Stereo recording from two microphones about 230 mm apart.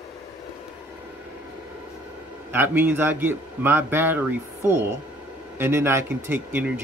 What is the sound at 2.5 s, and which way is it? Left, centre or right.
A man's voice, centre.